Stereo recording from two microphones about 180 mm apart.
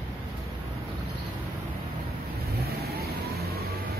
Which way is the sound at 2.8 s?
60° right (ahead or behind).